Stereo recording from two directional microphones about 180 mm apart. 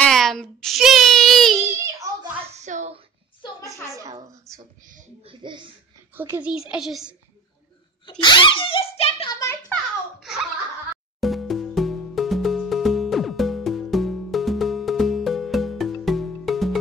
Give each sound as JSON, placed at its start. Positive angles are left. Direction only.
{"t": 0.0, "sound": "a sound", "side_deg": 0}
{"t": 2.6, "sound": "a sound", "side_deg": -40}
{"t": 3.9, "sound": "a sound", "side_deg": -20}
{"t": 5.2, "sound": "a child's voice", "side_deg": -25}
{"t": 6.1, "sound": "speech", "side_deg": -10}
{"t": 6.7, "sound": "a child's voice", "side_deg": 0}
{"t": 8.0, "sound": "a child's voice", "side_deg": 25}
{"t": 9.3, "sound": "a child's voice", "side_deg": 15}
{"t": 10.2, "sound": "chuckle", "side_deg": -5}
{"t": 11.1, "sound": "music", "side_deg": 0}